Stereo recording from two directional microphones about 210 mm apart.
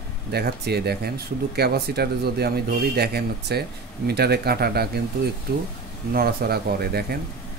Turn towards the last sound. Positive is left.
turn(degrees=-45)  # may be behind; listen again after turning